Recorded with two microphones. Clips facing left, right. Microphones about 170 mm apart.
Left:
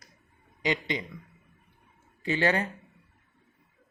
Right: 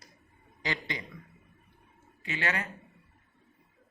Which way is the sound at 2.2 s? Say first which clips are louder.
Left 8 dB; 30° left (ahead or behind).